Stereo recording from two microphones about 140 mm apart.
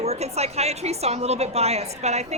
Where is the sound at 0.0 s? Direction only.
50° right (ahead or behind).